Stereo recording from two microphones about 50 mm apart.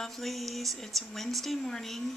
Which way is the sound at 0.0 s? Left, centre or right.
Centre.